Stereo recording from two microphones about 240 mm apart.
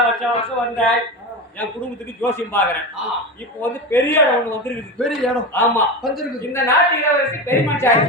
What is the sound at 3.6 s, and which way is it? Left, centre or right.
A man's voice, centre.